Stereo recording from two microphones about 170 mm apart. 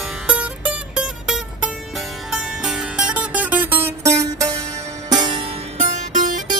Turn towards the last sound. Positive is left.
turn(degrees=-50)  # may be behind; listen again after turning